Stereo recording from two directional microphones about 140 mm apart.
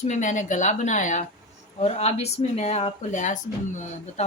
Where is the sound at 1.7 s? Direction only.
50° left (ahead or behind).